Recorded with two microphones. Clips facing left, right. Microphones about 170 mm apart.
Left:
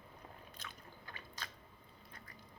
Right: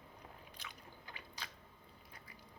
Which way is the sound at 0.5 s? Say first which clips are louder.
Left 1 dB; 15° right (ahead or behind).